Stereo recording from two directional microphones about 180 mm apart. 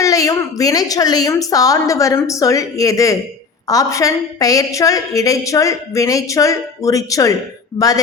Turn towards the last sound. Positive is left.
turn(degrees=20)  # may be behind; listen again after turning